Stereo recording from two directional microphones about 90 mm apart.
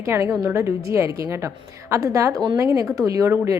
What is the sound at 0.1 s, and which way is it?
A woman's voice, 30° right (ahead or behind).